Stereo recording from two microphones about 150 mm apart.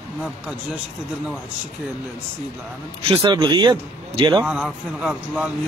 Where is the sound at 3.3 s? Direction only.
30° right (ahead or behind).